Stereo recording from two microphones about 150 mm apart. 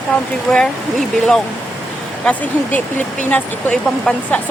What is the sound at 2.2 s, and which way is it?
Speech, 10° left (ahead or behind).